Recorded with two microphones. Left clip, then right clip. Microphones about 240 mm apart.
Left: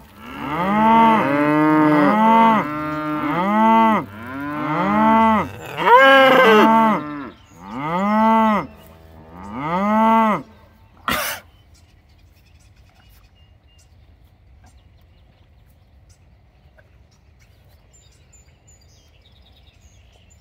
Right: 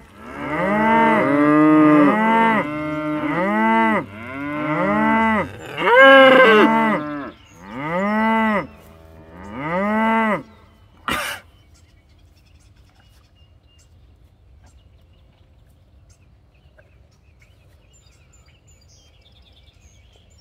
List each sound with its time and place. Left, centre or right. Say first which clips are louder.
0.2 s moo: even; centre
0.5 s moo: left 2 dB; centre
1.3 s moo: right 2 dB; centre
1.9 s moo: even; centre
2.6 s moo: even; centre
3.3 s moo: left 3 dB; centre
4.2 s moo: even; centre
4.6 s cattle: left 2 dB; centre
7.1 s cattle: right 2 dB; centre
7.5 s moo: left 1 dB; centre
11.1 s cough: left 1 dB; left